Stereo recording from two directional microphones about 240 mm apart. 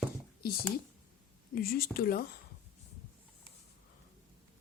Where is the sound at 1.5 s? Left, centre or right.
Left.